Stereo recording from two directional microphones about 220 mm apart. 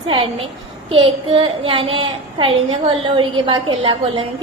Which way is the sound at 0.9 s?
25° right (ahead or behind).